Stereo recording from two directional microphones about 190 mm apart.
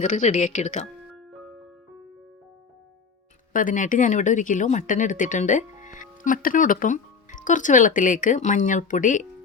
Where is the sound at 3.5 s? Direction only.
45° left (ahead or behind).